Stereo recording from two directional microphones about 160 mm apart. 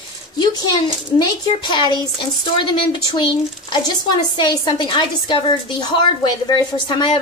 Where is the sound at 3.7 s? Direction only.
25° left (ahead or behind).